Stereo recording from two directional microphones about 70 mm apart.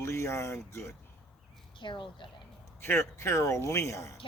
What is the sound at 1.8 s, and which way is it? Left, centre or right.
Speech, left.